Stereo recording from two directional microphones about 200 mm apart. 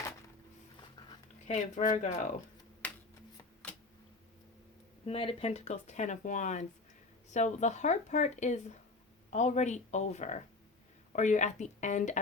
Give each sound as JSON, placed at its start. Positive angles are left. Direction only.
{"t": 1.5, "sound": "speech", "side_deg": 35}
{"t": 2.8, "sound": "shuffling cards", "side_deg": 5}
{"t": 5.0, "sound": "speech", "side_deg": 30}